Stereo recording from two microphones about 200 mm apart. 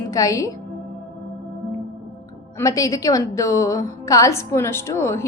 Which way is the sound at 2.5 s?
15° left (ahead or behind).